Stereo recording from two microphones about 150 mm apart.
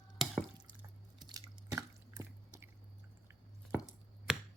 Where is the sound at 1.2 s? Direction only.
30° right (ahead or behind).